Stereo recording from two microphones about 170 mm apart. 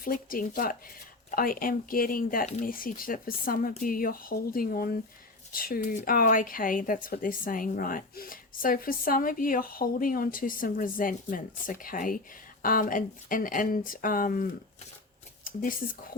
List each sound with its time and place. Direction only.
0.0 s speech: 55° left (ahead or behind)
15.4 s speech: 55° left (ahead or behind)